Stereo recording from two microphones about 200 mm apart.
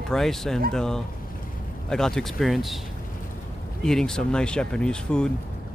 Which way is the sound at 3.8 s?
5° left (ahead or behind).